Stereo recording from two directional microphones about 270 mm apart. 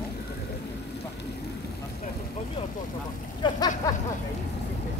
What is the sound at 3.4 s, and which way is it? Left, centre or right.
Vehicle, centre.